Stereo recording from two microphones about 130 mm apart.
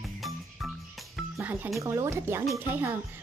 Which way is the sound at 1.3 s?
15° right (ahead or behind).